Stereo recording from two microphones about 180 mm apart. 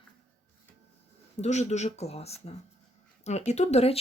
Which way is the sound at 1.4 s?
40° left (ahead or behind).